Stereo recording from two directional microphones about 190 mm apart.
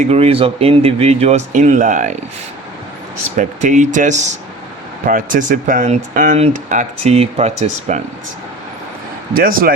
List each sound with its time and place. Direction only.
0.0 s speech: 30° right (ahead or behind)
3.3 s speech: 40° right (ahead or behind)
9.3 s speech: 50° right (ahead or behind)